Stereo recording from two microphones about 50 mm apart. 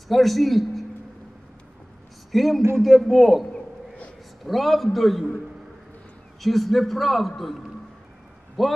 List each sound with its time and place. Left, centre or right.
0.1 s a man's voice: centre
2.3 s a man's voice: centre
3.5 s a sound: left
4.5 s a man's voice: centre
6.4 s a man's voice: centre